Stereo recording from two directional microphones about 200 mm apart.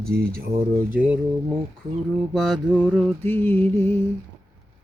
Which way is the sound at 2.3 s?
Centre (ahead or behind).